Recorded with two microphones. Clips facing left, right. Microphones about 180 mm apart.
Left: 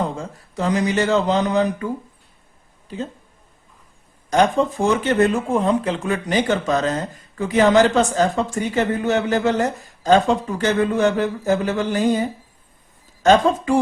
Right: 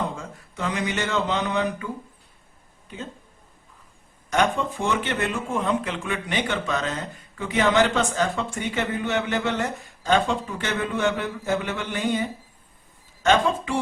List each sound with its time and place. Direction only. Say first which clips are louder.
0.2 s speech: left 6 dB; 35° left (ahead or behind)
4.3 s speech: left 6 dB; 35° left (ahead or behind)